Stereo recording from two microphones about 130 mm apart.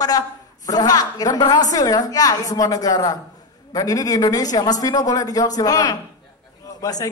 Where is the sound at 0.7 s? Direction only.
30° left (ahead or behind).